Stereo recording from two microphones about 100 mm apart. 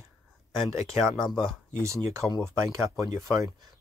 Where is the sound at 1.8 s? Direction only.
30° right (ahead or behind).